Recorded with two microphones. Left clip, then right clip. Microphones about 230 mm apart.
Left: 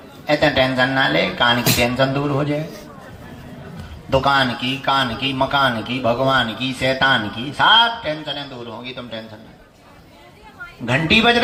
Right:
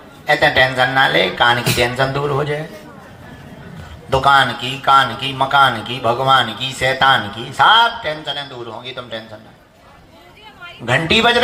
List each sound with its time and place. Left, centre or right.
0.3 s a man's voice: right
4.1 s a man's voice: right
10.8 s a man's voice: right